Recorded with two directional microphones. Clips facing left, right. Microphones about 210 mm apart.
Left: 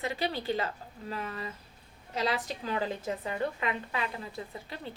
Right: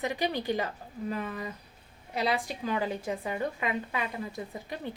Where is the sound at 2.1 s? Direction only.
10° right (ahead or behind).